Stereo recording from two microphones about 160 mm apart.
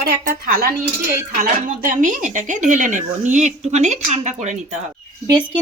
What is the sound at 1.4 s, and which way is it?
Speech, 55° right (ahead or behind).